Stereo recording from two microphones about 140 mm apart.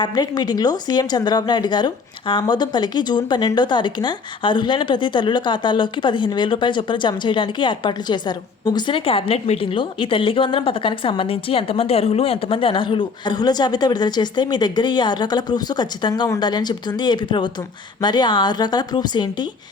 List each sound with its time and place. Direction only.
0.0 s a woman's voice: 30° left (ahead or behind)